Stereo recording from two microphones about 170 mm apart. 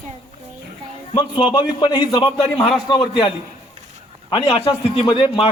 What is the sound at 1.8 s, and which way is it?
A man's voice, 25° left (ahead or behind).